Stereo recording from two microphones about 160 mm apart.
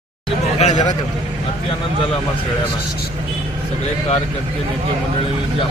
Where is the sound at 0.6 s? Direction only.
45° left (ahead or behind).